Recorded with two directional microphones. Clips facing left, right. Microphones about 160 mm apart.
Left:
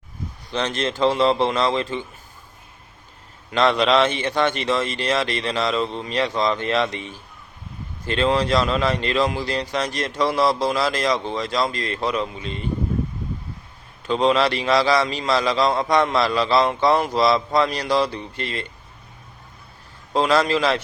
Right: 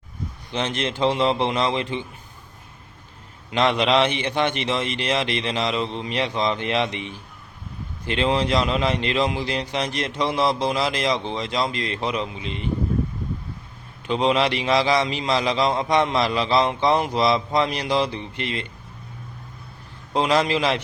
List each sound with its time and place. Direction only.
0.5 s a man's voice: 15° right (ahead or behind)
3.5 s a man's voice: 15° right (ahead or behind)
14.1 s a man's voice: 20° right (ahead or behind)
20.1 s a man's voice: 20° right (ahead or behind)